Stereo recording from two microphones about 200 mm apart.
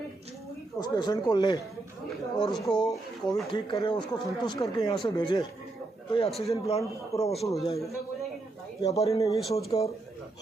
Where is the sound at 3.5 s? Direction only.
25° left (ahead or behind).